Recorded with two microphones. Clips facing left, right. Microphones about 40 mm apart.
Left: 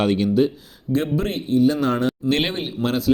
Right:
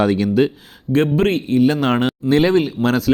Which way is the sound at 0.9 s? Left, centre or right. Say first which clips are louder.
Right 6 dB; right.